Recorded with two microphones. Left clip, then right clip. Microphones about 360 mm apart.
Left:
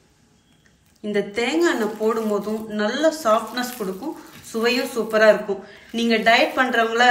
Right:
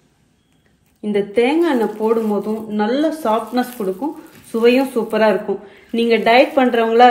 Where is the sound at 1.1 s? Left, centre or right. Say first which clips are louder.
Right 6 dB; centre.